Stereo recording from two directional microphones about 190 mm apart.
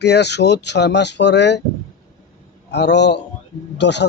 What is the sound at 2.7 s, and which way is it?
Speech, 65° left (ahead or behind).